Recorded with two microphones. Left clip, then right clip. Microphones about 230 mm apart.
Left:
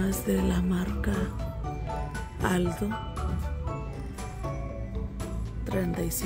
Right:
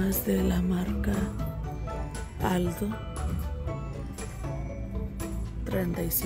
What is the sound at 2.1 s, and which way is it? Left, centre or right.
Music, centre.